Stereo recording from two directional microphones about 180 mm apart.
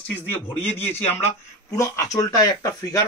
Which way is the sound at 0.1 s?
10° left (ahead or behind).